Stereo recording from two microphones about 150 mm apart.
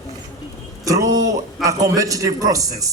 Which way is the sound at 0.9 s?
25° right (ahead or behind).